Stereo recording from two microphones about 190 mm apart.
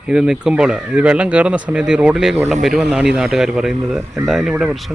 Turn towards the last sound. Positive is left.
turn(degrees=0)  # may be behind; listen again after turning